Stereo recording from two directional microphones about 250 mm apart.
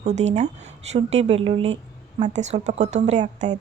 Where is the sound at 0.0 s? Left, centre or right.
Right.